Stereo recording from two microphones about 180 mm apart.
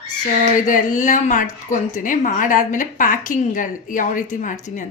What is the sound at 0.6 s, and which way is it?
A woman's voice, 45° left (ahead or behind).